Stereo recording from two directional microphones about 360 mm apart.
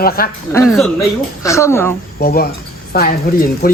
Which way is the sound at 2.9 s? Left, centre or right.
Left.